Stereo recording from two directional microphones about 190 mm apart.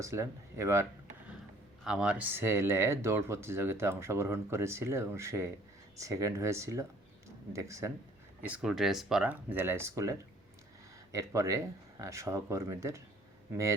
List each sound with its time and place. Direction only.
0.0 s speech: 15° right (ahead or behind)
1.8 s speech: 5° right (ahead or behind)